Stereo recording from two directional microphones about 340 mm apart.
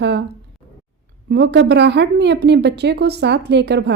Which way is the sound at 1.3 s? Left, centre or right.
Right.